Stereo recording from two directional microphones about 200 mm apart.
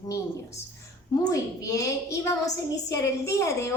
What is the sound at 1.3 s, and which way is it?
A woman's voice, 15° left (ahead or behind).